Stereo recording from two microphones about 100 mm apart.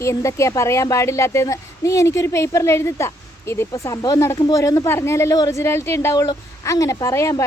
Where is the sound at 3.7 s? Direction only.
40° left (ahead or behind).